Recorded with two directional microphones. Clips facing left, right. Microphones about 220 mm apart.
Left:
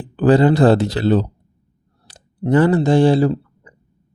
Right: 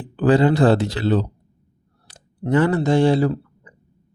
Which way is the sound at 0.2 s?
40° left (ahead or behind).